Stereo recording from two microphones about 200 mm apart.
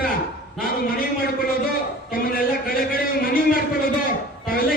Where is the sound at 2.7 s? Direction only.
45° left (ahead or behind).